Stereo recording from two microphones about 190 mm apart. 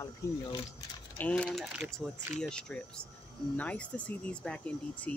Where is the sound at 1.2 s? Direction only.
5° left (ahead or behind).